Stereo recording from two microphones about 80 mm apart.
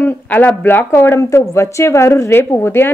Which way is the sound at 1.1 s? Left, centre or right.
Left.